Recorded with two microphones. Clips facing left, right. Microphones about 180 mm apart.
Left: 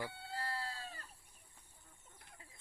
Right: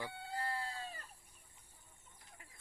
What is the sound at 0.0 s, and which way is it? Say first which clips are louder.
Chicken: right 1 dB; 15° right (ahead or behind).